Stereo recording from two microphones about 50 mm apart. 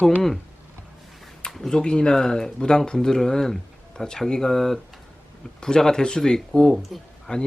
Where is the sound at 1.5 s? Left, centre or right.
Centre.